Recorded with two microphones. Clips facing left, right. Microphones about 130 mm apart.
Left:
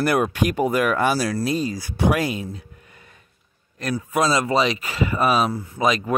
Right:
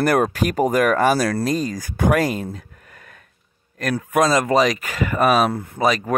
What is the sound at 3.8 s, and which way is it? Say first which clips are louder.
Speech: right 3 dB; 55° right (ahead or behind).